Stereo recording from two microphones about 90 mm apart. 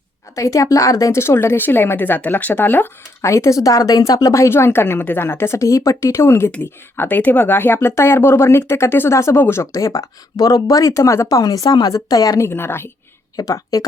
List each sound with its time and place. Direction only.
0.3 s a woman's voice: 35° left (ahead or behind)
12.5 s a woman's voice: 25° left (ahead or behind)
13.3 s speech: 40° left (ahead or behind)